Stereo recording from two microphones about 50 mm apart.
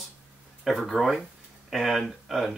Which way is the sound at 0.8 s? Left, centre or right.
Centre.